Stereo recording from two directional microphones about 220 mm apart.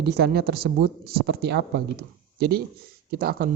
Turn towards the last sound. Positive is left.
turn(degrees=-45)  # may be behind; listen again after turning